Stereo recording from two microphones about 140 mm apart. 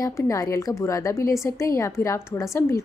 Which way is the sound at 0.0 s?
25° left (ahead or behind).